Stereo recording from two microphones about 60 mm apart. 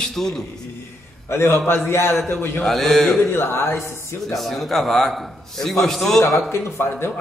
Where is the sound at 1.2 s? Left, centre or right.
Left.